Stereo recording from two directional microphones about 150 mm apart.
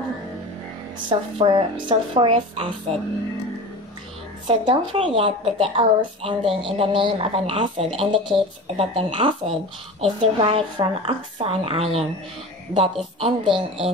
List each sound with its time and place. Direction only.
1.0 s a woman's voice: 30° right (ahead or behind)
4.5 s a woman's voice: 35° right (ahead or behind)
13.2 s a woman's voice: 35° right (ahead or behind)